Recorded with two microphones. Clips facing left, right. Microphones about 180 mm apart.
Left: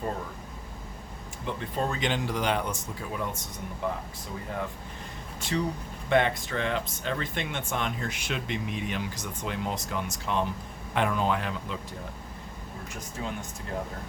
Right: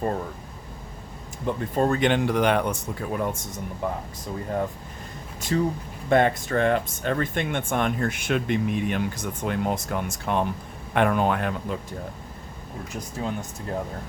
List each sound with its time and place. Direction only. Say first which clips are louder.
1.7 s speech: right 8 dB; 50° right (ahead or behind)
5.4 s speech: right 5 dB; 40° right (ahead or behind)
13.2 s speech: right 5 dB; 35° right (ahead or behind)